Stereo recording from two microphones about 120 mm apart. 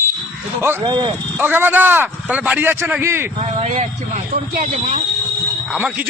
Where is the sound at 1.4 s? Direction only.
15° right (ahead or behind).